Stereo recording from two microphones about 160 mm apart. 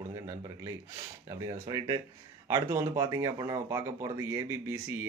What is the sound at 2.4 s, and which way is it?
Speech, 20° right (ahead or behind).